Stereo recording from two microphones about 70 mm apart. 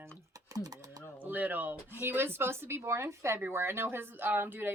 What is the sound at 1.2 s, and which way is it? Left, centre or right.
Speech, right.